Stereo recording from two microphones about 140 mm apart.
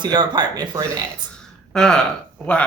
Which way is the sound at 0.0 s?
30° right (ahead or behind).